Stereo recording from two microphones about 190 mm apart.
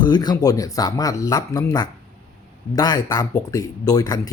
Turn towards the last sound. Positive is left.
turn(degrees=20)  # may be behind; listen again after turning